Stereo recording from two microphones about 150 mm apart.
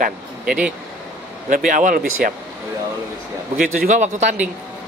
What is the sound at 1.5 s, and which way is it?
Speech, 65° right (ahead or behind).